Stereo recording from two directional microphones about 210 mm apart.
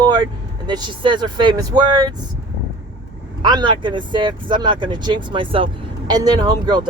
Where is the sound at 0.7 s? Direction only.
20° right (ahead or behind).